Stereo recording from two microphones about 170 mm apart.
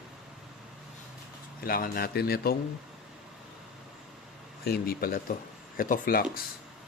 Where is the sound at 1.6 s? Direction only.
60° left (ahead or behind).